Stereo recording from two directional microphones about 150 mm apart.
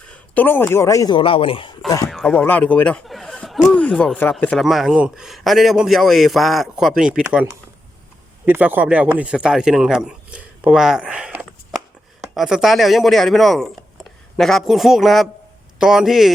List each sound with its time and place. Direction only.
0.0 s a man's voice: 10° left (ahead or behind); by 1.8 s 35° left (ahead or behind)
2.0 s speech: centre (ahead or behind)
4.6 s a man's voice: centre (ahead or behind)
8.4 s a man's voice: 10° right (ahead or behind)